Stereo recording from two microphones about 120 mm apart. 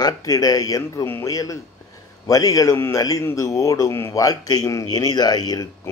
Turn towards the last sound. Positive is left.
turn(degrees=35)  # may be behind; listen again after turning